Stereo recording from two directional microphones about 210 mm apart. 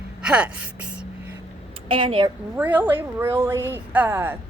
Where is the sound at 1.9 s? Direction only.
25° right (ahead or behind).